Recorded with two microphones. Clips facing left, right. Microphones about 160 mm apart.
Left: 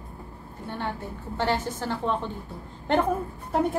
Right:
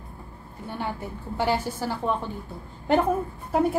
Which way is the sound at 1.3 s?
10° right (ahead or behind).